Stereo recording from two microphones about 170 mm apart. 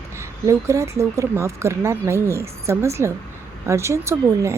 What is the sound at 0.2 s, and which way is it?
A woman's voice, 15° right (ahead or behind).